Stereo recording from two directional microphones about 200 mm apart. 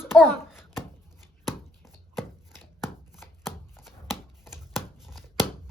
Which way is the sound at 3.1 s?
Centre (ahead or behind).